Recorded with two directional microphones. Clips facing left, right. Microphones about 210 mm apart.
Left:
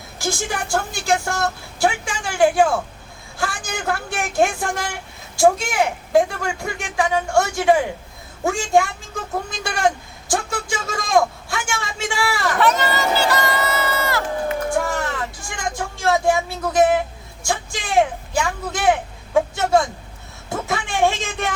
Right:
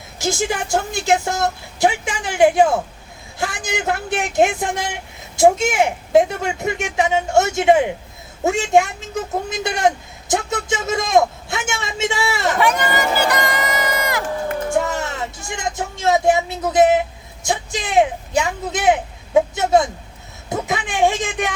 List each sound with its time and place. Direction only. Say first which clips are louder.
0.2 s a woman's voice: right 4 dB; 20° right (ahead or behind)
14.7 s a sound: right 1 dB; 20° right (ahead or behind)
17.4 s speech: right 3 dB; 20° right (ahead or behind)